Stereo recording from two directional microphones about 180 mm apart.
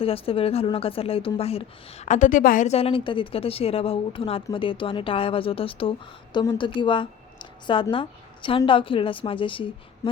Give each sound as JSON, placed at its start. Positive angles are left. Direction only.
{"t": 0.0, "sound": "a woman's voice", "side_deg": 30}